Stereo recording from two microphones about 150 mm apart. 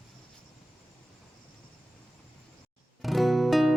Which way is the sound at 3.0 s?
Centre (ahead or behind).